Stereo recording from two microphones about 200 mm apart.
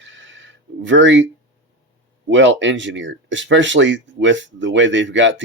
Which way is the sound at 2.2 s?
65° right (ahead or behind).